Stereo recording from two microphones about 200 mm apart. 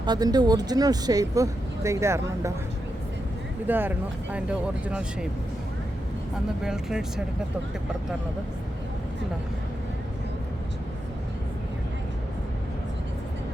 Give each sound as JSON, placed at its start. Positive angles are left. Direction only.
{"t": 0.0, "sound": "speech", "side_deg": -20}
{"t": 3.7, "sound": "speech", "side_deg": -10}
{"t": 6.6, "sound": "speech", "side_deg": -5}